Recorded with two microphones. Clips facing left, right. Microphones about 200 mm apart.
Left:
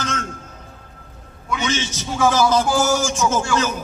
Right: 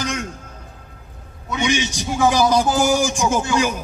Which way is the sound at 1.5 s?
15° right (ahead or behind).